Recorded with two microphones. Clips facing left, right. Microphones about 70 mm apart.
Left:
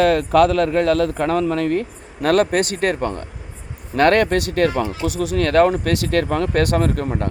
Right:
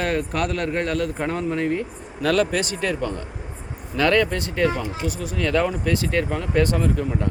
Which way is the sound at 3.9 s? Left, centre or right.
Left.